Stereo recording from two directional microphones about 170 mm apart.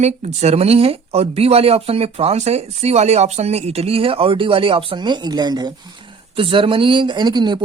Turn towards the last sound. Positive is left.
turn(degrees=-25)  # may be behind; listen again after turning